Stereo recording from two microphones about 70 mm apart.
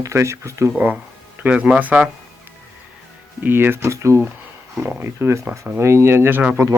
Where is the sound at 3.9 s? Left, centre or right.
Right.